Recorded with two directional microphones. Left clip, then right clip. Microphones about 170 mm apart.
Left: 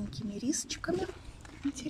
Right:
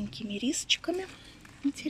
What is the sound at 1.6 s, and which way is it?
Speech, 50° left (ahead or behind).